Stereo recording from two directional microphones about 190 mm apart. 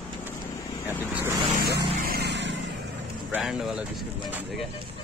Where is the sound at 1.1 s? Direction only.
10° right (ahead or behind).